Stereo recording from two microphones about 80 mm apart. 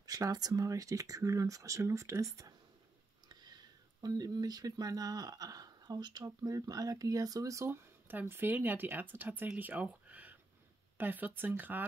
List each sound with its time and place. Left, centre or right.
0.0 s speech: right
3.3 s speech: right
9.6 s a sound: centre
11.0 s speech: right